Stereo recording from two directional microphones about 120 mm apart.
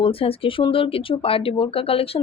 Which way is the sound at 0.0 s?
50° left (ahead or behind).